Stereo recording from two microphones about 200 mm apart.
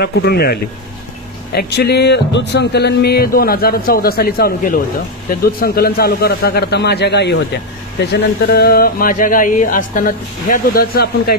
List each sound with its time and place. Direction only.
0.0 s speech: 55° left (ahead or behind)